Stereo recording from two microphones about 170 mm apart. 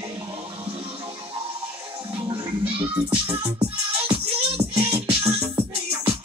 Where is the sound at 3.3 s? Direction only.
35° right (ahead or behind).